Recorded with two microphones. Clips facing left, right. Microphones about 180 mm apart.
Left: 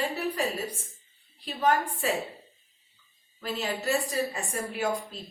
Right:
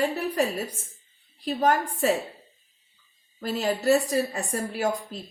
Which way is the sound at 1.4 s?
40° right (ahead or behind).